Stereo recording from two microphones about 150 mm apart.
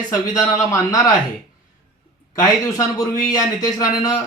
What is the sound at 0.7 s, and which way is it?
Speech, 25° left (ahead or behind).